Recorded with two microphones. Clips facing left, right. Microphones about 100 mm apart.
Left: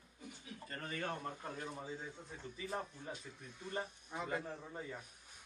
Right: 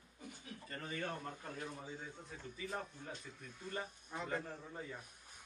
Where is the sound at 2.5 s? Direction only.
35° left (ahead or behind).